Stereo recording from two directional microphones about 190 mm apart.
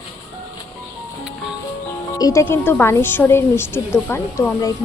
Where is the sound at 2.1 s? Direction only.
20° left (ahead or behind).